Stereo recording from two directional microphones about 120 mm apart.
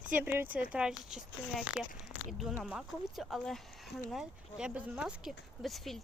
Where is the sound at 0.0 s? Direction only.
10° right (ahead or behind).